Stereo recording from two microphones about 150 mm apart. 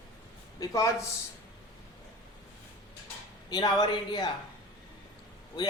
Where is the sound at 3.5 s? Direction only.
25° left (ahead or behind).